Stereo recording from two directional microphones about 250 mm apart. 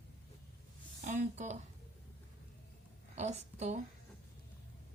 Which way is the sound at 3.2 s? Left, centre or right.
Right.